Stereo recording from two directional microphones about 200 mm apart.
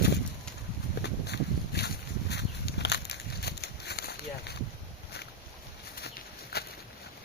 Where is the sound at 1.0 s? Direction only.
55° left (ahead or behind).